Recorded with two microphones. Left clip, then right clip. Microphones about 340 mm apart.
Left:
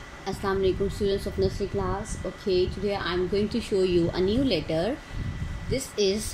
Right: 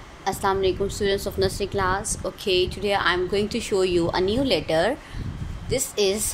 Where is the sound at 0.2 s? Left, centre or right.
Centre.